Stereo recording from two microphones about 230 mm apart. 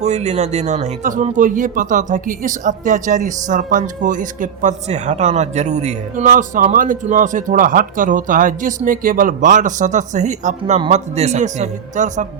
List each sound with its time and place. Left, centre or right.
0.0 s speech: right